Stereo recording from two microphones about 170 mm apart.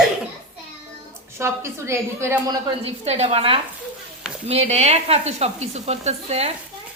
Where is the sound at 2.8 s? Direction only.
40° right (ahead or behind).